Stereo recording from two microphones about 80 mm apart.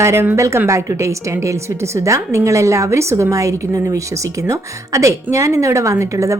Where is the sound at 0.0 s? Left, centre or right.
Right.